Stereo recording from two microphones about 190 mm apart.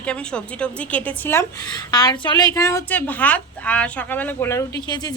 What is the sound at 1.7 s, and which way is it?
A woman's voice, 20° left (ahead or behind).